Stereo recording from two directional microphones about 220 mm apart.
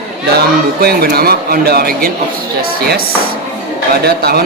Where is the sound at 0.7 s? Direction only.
45° right (ahead or behind).